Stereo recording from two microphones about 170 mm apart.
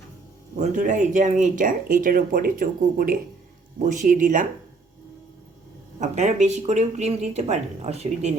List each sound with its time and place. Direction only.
0.6 s speech: 50° right (ahead or behind)
6.0 s speech: 45° right (ahead or behind)